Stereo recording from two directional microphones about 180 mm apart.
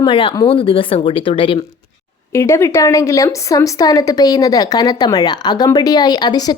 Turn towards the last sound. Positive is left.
turn(degrees=20)  # may be behind; listen again after turning